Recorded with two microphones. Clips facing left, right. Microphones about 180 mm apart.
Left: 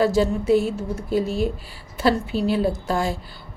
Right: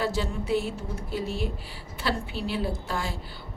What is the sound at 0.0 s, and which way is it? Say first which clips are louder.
A woman's voice: left 9 dB; 45° left (ahead or behind).